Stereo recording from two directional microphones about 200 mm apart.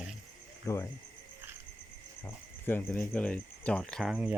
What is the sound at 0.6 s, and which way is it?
Speech, 15° left (ahead or behind).